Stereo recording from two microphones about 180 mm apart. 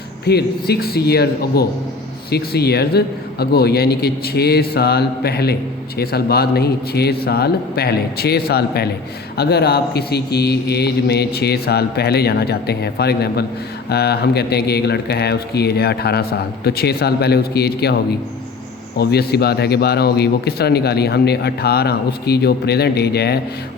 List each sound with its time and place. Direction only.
0.3 s a man's voice: 65° left (ahead or behind)